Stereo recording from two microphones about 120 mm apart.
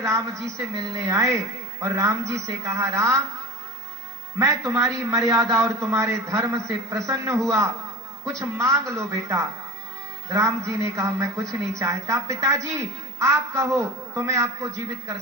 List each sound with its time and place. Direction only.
0.0 s a woman's voice: 25° right (ahead or behind)
4.4 s a woman's voice: 25° right (ahead or behind)